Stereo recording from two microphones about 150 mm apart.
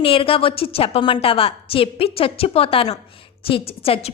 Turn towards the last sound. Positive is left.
turn(degrees=40)  # may be behind; listen again after turning